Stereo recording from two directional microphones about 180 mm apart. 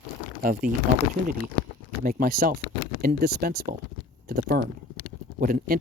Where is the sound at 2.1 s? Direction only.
55° right (ahead or behind).